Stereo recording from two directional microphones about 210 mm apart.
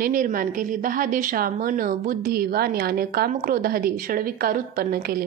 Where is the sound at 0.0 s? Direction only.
40° right (ahead or behind).